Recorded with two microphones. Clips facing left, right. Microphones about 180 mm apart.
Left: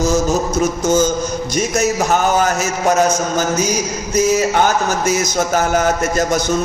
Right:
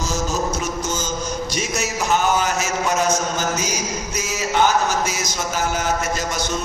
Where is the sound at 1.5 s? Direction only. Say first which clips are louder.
Left 8 dB; 50° left (ahead or behind).